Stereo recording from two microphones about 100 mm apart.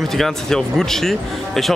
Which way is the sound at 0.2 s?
5° left (ahead or behind).